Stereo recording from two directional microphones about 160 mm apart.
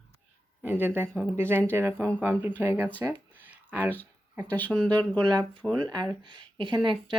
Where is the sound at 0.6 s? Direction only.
10° right (ahead or behind).